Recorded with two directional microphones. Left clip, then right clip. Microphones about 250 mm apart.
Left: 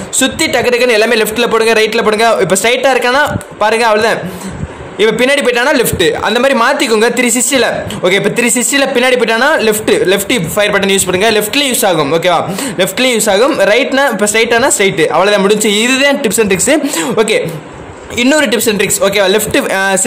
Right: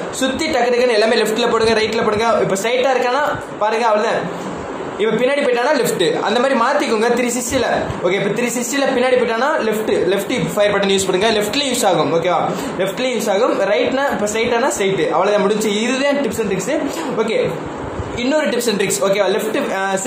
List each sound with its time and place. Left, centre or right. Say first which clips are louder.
0.2 s a man's voice: left 6 dB; left
18.2 s a man's voice: left 7 dB; left